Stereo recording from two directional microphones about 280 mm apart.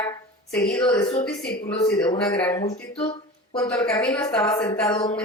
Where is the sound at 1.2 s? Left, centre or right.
Centre.